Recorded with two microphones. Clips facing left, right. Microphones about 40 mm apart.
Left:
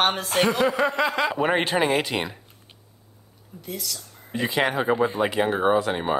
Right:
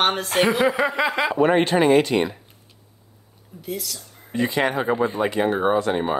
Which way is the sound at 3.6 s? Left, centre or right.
Centre.